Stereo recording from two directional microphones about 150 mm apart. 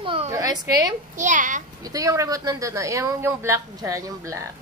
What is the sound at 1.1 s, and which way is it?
Speech, 55° right (ahead or behind).